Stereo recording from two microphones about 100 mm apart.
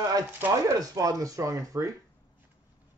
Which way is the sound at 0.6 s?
35° right (ahead or behind).